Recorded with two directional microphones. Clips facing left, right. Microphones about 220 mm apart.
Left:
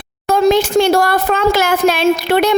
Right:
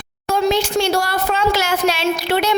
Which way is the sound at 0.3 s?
50° left (ahead or behind).